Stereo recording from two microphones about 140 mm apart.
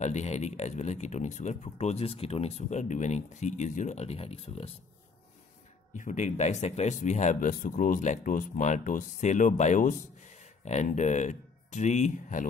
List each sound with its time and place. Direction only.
0.0 s speech: 55° left (ahead or behind)
5.9 s speech: 60° left (ahead or behind)